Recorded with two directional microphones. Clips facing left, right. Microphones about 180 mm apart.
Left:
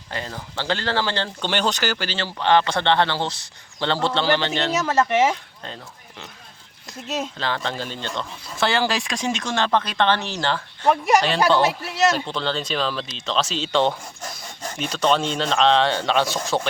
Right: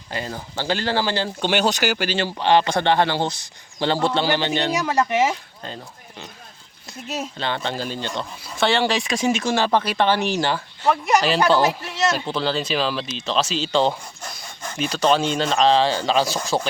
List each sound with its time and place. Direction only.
0.3 s speech: 25° right (ahead or behind)
0.6 s speech: 10° right (ahead or behind)
7.1 s speech: 5° right (ahead or behind)